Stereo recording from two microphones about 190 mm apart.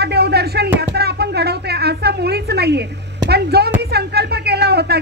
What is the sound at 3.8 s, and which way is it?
Speech, 60° right (ahead or behind).